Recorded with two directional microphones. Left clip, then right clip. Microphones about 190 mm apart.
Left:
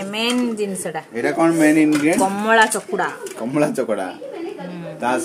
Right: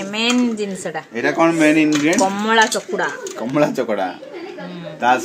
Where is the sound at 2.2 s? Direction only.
10° left (ahead or behind).